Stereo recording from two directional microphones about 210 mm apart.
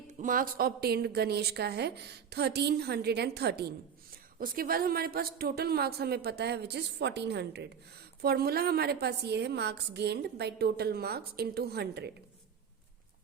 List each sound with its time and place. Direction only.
0.1 s a woman's voice: 40° right (ahead or behind)